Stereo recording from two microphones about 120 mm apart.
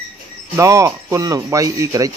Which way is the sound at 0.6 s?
25° right (ahead or behind).